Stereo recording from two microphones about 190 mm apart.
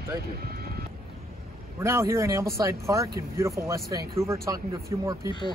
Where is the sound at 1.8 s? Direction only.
15° right (ahead or behind).